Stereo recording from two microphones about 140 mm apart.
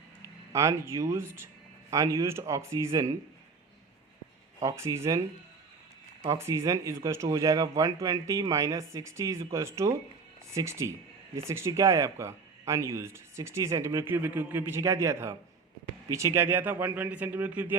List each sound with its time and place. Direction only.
0.2 s speech: 20° right (ahead or behind)
4.6 s speech: 20° right (ahead or behind)
6.2 s speech: 20° right (ahead or behind)